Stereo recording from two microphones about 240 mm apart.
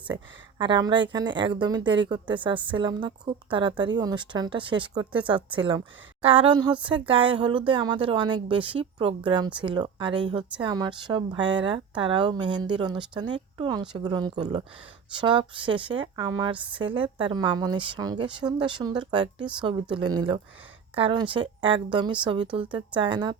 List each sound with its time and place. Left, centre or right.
0.6 s a woman's voice: centre